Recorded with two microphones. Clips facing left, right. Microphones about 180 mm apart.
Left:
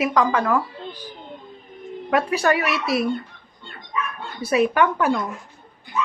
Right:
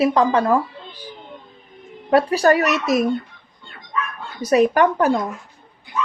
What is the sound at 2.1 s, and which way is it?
Speech, 35° right (ahead or behind).